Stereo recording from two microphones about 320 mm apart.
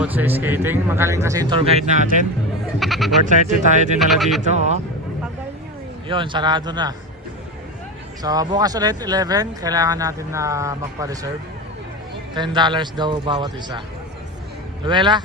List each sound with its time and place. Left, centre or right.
0.0 s speech: centre; by 2.0 s right
2.7 s speech: centre
3.2 s speech: right
3.9 s speech: centre
4.4 s speech: right
6.1 s speech: centre
8.2 s speech: centre
12.3 s speech: centre
14.8 s speech: centre